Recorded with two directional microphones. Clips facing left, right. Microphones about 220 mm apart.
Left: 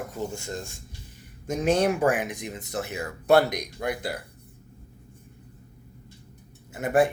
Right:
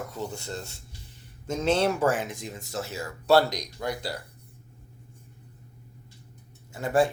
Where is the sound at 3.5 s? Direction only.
55° left (ahead or behind).